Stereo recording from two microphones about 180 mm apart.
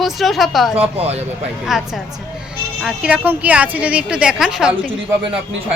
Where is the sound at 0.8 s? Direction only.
35° right (ahead or behind).